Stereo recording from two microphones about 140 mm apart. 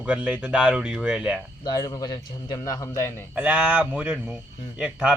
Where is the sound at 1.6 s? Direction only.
25° left (ahead or behind).